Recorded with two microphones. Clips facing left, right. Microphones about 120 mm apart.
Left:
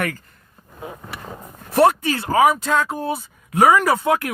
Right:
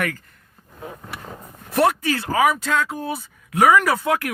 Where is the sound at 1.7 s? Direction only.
30° left (ahead or behind).